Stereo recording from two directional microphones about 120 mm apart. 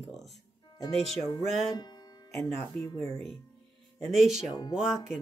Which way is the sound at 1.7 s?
35° left (ahead or behind).